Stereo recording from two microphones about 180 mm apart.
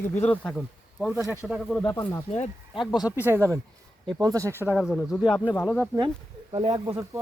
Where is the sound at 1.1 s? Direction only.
15° right (ahead or behind).